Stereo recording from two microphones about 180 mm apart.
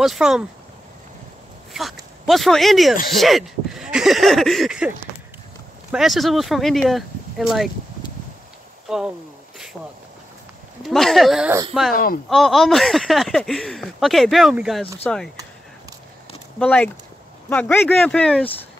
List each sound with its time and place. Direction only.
0.0 s speech: centre (ahead or behind)
1.7 s speech: centre (ahead or behind)
8.8 s speech: 5° right (ahead or behind)
10.8 s speech: centre (ahead or behind)
11.9 s speech: 55° left (ahead or behind)
12.3 s speech: centre (ahead or behind)
16.5 s speech: 5° left (ahead or behind)